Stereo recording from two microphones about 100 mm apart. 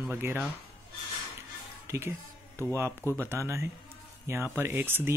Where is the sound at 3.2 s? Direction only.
25° right (ahead or behind).